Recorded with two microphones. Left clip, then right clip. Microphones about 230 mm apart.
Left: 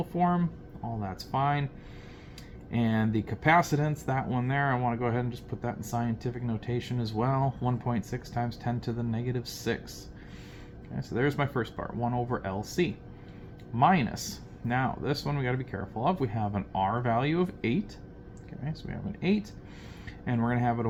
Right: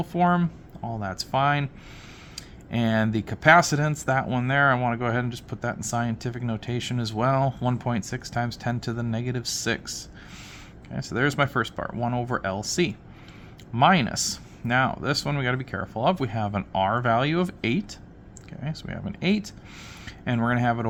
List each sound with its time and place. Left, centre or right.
0.0 s speech: right